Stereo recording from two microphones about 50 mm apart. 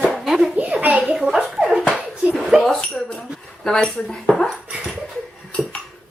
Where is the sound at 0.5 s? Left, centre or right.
Right.